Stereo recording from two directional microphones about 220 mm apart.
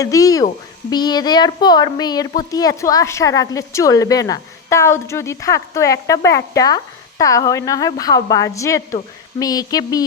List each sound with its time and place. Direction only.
0.0 s speech: 15° left (ahead or behind)